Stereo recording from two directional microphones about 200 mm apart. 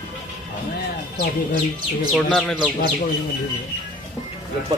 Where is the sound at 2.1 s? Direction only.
Centre (ahead or behind).